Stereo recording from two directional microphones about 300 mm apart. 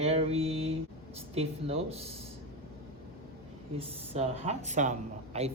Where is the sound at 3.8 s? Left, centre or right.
Centre.